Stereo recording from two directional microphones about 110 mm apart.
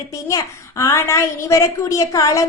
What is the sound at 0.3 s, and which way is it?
A woman's voice, 30° left (ahead or behind).